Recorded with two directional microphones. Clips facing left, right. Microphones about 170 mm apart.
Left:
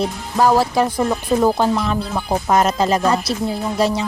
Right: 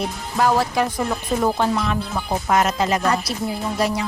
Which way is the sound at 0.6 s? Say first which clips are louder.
Left 4 dB; 30° left (ahead or behind).